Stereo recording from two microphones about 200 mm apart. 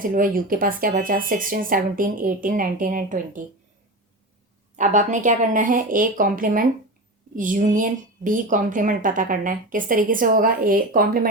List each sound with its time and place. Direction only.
0.0 s speech: 45° right (ahead or behind)
4.8 s speech: 40° right (ahead or behind)